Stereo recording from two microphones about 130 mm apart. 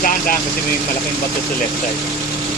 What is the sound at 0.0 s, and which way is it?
Vehicle, 90° left.